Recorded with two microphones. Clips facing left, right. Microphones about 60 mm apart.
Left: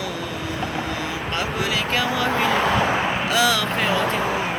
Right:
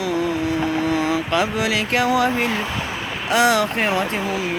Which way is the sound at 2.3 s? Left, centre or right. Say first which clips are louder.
Left 1 dB; left.